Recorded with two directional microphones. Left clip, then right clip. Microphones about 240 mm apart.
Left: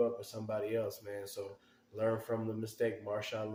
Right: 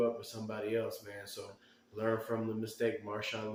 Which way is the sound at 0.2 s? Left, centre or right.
Left.